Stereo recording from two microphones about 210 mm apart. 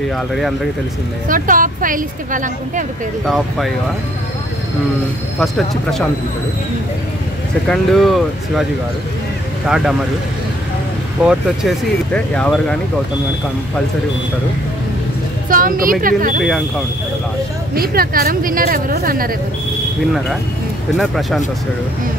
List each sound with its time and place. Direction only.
1.3 s a woman's voice: 40° right (ahead or behind)
3.3 s speech: centre (ahead or behind)
5.4 s speech: centre (ahead or behind)
7.6 s speech: centre (ahead or behind)
9.7 s speech: centre (ahead or behind)
11.2 s speech: centre (ahead or behind)
15.5 s a woman's voice: 40° right (ahead or behind)
17.7 s a woman's voice: 45° right (ahead or behind)
21.0 s speech: centre (ahead or behind)